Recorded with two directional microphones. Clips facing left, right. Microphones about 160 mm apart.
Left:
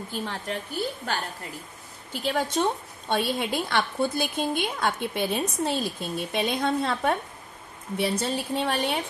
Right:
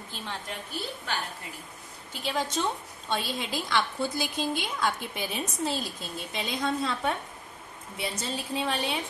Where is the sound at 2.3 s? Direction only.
55° left (ahead or behind).